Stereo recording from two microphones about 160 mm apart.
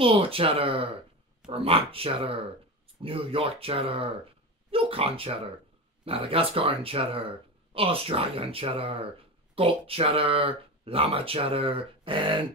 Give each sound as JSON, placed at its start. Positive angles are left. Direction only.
{"t": 0.0, "sound": "speech", "side_deg": -35}